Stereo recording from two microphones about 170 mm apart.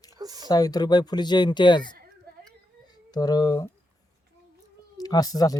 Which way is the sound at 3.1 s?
25° left (ahead or behind).